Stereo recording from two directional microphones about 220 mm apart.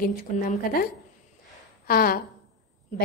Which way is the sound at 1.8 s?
40° left (ahead or behind).